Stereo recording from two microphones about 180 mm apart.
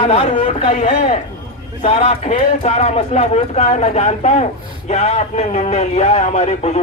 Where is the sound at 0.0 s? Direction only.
35° left (ahead or behind).